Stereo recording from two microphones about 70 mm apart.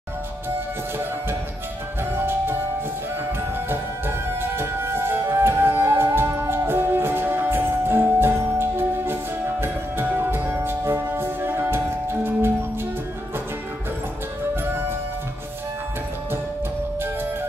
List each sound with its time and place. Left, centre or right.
3.3 s music: right